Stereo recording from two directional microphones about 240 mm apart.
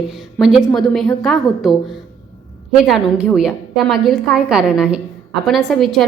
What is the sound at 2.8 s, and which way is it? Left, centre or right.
A woman's voice, centre.